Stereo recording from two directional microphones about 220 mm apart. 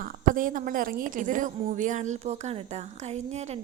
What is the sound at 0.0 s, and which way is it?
A woman's voice, 40° right (ahead or behind).